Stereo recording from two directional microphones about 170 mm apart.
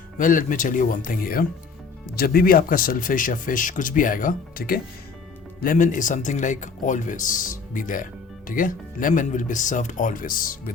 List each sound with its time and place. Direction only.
0.2 s speech: 50° left (ahead or behind)
5.6 s speech: 50° left (ahead or behind)